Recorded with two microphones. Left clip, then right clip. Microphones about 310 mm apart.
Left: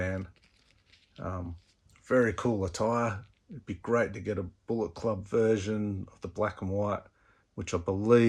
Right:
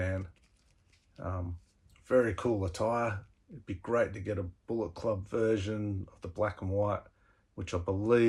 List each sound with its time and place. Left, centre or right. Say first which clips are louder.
0.0 s crumpling: left 2 dB; left
1.1 s a sound: left 2 dB; left
2.0 s speech: left 1 dB; left